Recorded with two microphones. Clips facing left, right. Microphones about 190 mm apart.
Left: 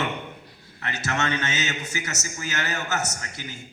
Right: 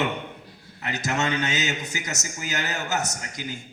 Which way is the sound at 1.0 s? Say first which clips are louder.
Right 1 dB; 15° right (ahead or behind).